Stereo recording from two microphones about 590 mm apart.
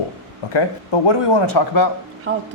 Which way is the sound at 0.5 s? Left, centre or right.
Left.